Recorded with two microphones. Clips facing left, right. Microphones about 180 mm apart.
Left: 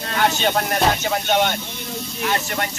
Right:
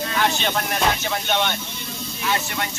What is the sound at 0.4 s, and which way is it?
Speech, 45° left (ahead or behind).